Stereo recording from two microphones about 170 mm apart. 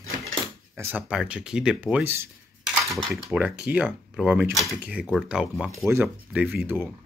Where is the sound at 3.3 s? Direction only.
10° right (ahead or behind).